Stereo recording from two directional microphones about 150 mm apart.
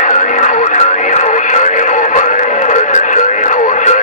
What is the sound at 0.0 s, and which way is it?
Radio, 55° left (ahead or behind).